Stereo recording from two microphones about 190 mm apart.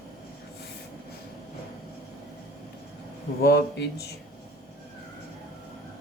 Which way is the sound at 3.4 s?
55° left (ahead or behind).